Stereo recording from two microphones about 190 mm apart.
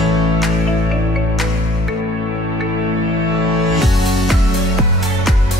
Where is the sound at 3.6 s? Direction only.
Centre (ahead or behind).